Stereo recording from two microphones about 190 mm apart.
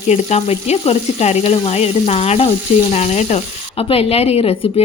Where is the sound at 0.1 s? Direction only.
35° left (ahead or behind).